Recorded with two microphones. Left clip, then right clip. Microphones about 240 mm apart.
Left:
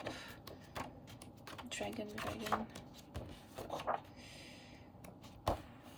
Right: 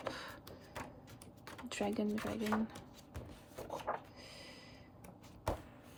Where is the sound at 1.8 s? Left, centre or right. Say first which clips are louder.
Right 6 dB; centre.